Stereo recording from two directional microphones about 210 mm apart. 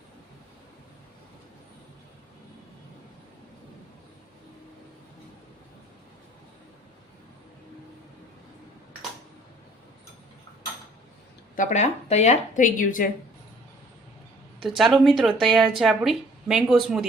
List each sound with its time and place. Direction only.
11.5 s a woman's voice: 35° left (ahead or behind)
14.6 s a woman's voice: centre (ahead or behind)